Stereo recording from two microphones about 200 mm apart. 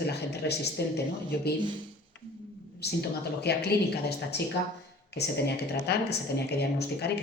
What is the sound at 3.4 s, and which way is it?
Speech, 55° left (ahead or behind).